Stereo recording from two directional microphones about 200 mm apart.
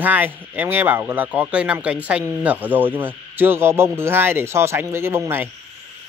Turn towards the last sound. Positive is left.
turn(degrees=-10)  # may be behind; listen again after turning